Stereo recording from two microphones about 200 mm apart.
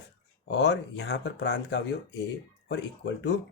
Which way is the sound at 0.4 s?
55° left (ahead or behind).